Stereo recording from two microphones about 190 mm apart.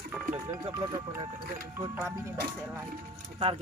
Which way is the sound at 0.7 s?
20° right (ahead or behind).